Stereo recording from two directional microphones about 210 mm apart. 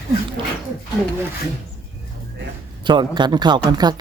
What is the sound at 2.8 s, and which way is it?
Speech, 20° right (ahead or behind).